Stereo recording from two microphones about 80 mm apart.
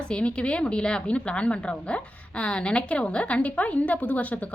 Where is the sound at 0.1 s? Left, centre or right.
Centre.